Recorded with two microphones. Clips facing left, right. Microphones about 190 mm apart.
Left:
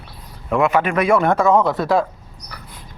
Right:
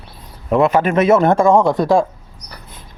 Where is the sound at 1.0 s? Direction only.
25° right (ahead or behind).